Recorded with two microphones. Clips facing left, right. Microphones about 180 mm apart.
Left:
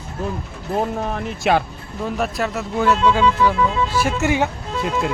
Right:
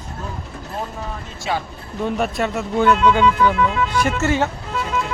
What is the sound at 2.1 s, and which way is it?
Speech, centre (ahead or behind).